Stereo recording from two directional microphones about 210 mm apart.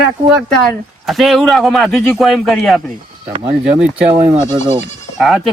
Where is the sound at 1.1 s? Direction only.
Centre (ahead or behind).